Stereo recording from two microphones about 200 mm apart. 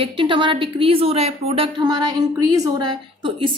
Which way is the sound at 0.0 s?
25° right (ahead or behind).